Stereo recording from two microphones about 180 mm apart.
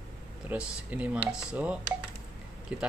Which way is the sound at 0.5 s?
5° right (ahead or behind).